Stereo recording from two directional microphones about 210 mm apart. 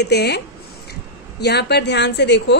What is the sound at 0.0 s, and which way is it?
Speech, 50° left (ahead or behind).